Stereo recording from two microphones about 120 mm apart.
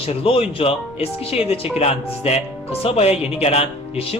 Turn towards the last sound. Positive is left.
turn(degrees=55)  # may be behind; listen again after turning